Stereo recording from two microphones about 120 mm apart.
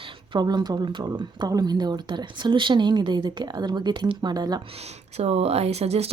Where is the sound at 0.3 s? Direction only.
35° right (ahead or behind).